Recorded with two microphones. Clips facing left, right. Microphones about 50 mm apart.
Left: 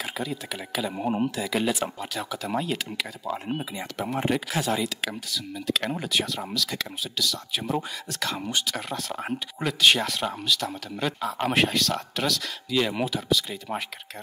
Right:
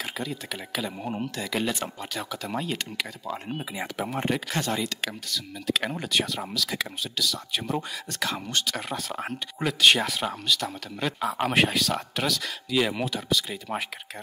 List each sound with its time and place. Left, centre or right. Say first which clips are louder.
0.0 s speech: left 1 dB; centre
0.9 s speech: left 6 dB; centre
1.3 s speech: left 2 dB; centre